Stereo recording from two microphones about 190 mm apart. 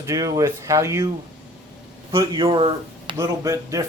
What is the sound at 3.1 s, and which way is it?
Speech, 15° right (ahead or behind).